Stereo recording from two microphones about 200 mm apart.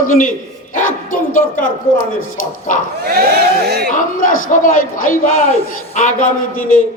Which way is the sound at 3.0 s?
50° right (ahead or behind).